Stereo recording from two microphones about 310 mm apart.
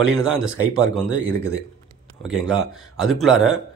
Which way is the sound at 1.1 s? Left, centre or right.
Right.